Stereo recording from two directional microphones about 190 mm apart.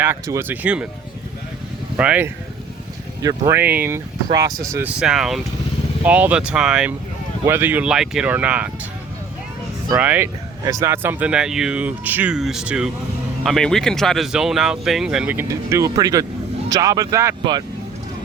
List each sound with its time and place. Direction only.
0.0 s speech: 15° right (ahead or behind)
2.0 s speech: 5° right (ahead or behind)
9.9 s speech: 10° right (ahead or behind)